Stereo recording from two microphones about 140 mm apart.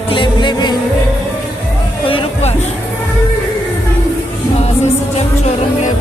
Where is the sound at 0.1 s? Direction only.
35° left (ahead or behind).